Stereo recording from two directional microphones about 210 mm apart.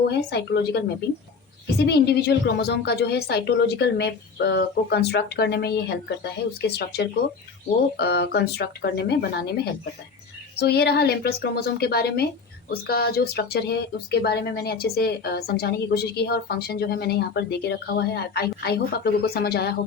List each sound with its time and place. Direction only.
0.1 s speech: 50° left (ahead or behind)
10.6 s speech: 50° left (ahead or behind)